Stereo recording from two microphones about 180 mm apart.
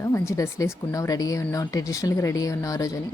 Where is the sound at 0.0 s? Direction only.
15° left (ahead or behind).